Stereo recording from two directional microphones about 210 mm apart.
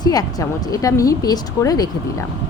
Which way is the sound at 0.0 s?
20° left (ahead or behind).